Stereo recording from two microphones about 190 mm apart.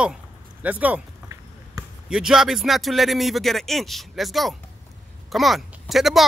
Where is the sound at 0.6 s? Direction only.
10° right (ahead or behind).